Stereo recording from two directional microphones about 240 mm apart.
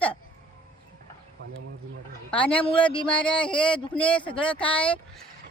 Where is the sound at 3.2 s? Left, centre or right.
Centre.